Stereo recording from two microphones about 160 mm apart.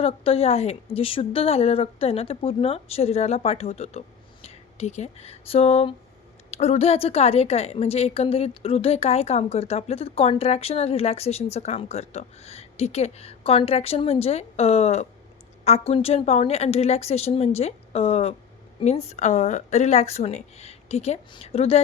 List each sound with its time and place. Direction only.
0.0 s a woman's voice: 40° left (ahead or behind)